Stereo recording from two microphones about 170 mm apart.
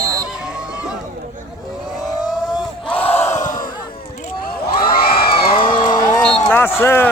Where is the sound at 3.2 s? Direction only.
45° left (ahead or behind).